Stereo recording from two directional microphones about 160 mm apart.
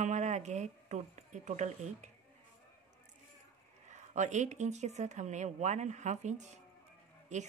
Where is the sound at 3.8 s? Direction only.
50° right (ahead or behind).